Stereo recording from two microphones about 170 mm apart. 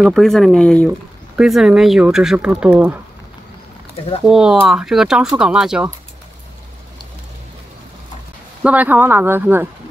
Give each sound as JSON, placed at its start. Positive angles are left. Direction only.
{"t": 0.0, "sound": "speech", "side_deg": 0}
{"t": 4.3, "sound": "speech", "side_deg": -5}
{"t": 8.6, "sound": "speech", "side_deg": -10}